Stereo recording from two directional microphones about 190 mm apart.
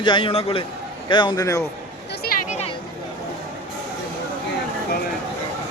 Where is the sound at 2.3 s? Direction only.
50° left (ahead or behind).